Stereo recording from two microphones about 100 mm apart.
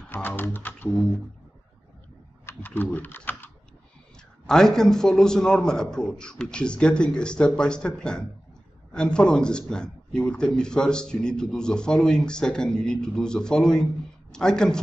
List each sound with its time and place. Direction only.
0.4 s speech: 20° left (ahead or behind)
2.4 s speech: 20° left (ahead or behind)
4.5 s speech: 5° left (ahead or behind)